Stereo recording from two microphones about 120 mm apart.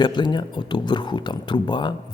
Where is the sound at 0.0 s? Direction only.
40° left (ahead or behind).